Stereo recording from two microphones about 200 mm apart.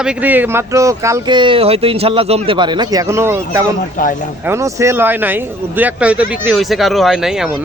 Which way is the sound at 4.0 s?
40° left (ahead or behind).